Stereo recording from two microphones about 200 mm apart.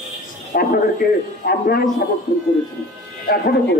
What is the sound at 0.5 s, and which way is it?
A man's voice, 50° left (ahead or behind).